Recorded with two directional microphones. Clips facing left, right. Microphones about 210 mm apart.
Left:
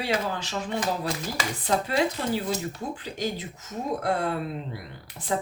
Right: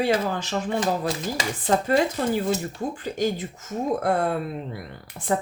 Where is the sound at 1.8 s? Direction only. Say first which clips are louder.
Right 4 dB; 50° right (ahead or behind).